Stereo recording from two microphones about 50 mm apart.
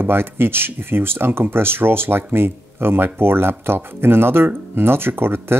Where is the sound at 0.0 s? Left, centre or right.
Right.